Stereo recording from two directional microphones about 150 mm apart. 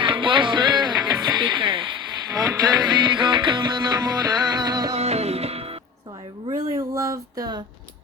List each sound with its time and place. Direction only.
0.0 s music: 35° right (ahead or behind)
4.9 s music: 45° right (ahead or behind)
6.7 s a sound: 20° right (ahead or behind)